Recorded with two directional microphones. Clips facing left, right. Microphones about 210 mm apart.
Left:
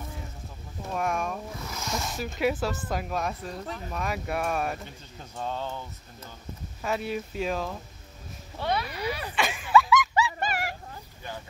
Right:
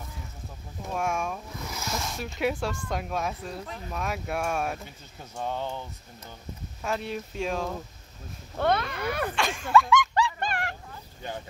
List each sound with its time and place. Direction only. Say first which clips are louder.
0.9 s speech: even; centre (ahead or behind)
5.4 s speech: right 1 dB; 15° right (ahead or behind)
6.8 s speech: left 1 dB; 5° left (ahead or behind)
8.5 s speech: right 4 dB; 50° right (ahead or behind)
9.3 s a sound: left 1 dB; 5° left (ahead or behind)